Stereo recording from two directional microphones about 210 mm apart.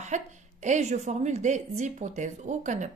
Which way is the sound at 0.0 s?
35° right (ahead or behind).